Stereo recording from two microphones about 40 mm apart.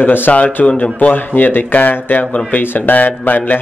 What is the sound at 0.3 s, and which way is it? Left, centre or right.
Speech, left.